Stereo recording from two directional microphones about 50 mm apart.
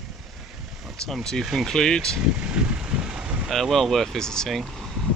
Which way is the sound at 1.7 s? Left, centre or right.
Centre.